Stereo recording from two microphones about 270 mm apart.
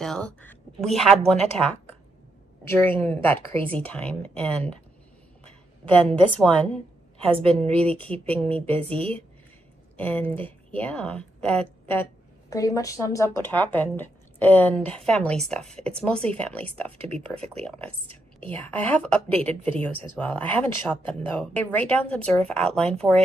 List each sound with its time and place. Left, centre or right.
0.0 s a woman's voice: centre
2.6 s a woman's voice: centre
5.9 s a woman's voice: centre
7.2 s a woman's voice: right
7.7 s a woman's voice: centre